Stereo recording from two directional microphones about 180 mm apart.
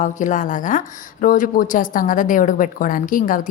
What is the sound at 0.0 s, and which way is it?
A woman's voice, 45° left (ahead or behind).